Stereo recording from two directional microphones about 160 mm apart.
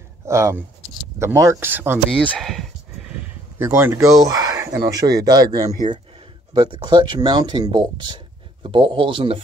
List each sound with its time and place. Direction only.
0.3 s speech: 15° right (ahead or behind)
2.0 s a man's voice: 5° left (ahead or behind); by 9.4 s 30° right (ahead or behind)